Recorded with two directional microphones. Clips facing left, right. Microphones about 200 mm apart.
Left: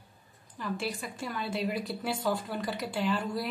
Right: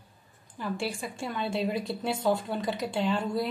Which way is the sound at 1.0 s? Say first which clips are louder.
Right 3 dB; 25° right (ahead or behind).